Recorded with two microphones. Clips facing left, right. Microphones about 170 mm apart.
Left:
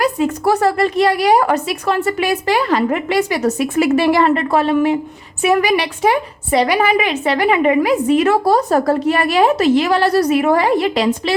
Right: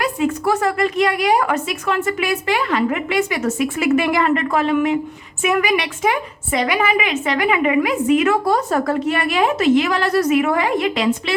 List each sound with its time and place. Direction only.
0.0 s a woman's voice: 40° left (ahead or behind)